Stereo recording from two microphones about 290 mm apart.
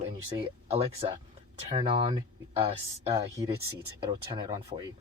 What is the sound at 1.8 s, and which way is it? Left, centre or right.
Speech, centre.